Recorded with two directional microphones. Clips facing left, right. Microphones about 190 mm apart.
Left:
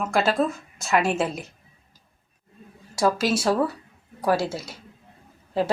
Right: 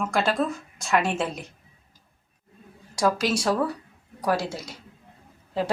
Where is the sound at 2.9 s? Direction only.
5° left (ahead or behind).